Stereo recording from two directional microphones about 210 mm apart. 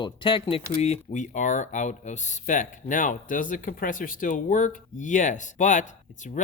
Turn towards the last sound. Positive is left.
turn(degrees=35)  # may be behind; listen again after turning